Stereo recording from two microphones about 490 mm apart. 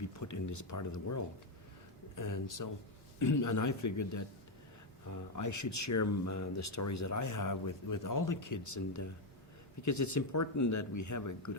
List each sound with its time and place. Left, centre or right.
0.0 s speech: left
5.4 s speech: left